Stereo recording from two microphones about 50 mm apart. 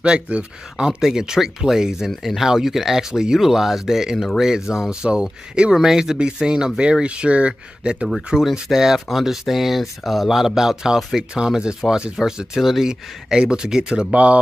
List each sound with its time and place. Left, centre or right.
0.0 s speech: right
8.4 s speech: centre
14.1 s speech: right